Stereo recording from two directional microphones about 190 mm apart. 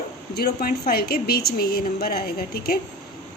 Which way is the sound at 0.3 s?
55° left (ahead or behind).